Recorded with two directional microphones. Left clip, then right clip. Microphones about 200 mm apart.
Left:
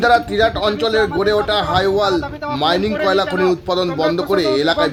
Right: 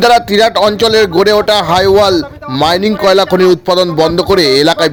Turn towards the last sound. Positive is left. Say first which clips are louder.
# right 7 dB
turn(degrees=-35)  # may be behind; listen again after turning